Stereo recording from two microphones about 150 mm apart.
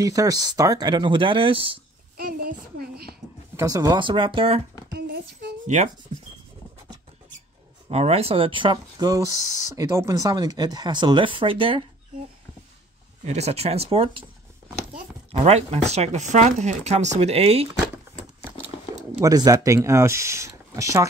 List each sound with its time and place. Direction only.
0.0 s speech: 25° right (ahead or behind)
2.1 s a sound: 80° right
3.5 s speech: 25° right (ahead or behind)
4.9 s a sound: 90° right
7.9 s speech: 40° right (ahead or behind)
13.2 s speech: 50° right (ahead or behind)
15.4 s speech: 45° right (ahead or behind)
19.2 s speech: 25° right (ahead or behind)